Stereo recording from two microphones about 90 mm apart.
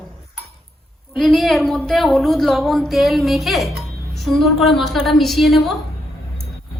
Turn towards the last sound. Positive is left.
turn(degrees=0)  # may be behind; listen again after turning